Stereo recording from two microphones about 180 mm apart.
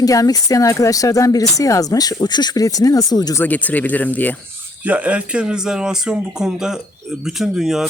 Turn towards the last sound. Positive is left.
turn(degrees=-5)  # may be behind; listen again after turning